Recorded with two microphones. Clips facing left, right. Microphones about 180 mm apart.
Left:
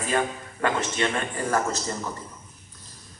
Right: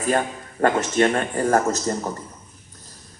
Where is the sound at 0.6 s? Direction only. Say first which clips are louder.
Right 7 dB; 45° right (ahead or behind).